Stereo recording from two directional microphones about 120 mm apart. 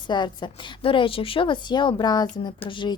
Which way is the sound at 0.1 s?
40° left (ahead or behind).